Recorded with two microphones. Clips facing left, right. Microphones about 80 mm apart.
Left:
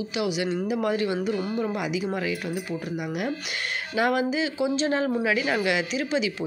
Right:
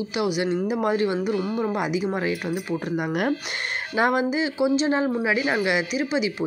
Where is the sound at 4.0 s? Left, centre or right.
Right.